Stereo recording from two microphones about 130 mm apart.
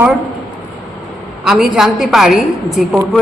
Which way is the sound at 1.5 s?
5° right (ahead or behind).